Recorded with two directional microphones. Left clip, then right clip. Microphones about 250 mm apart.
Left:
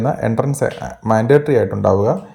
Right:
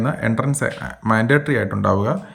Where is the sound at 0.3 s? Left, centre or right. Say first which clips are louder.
Left 4 dB; centre.